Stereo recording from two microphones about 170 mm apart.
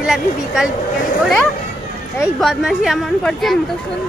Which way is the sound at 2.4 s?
Centre (ahead or behind).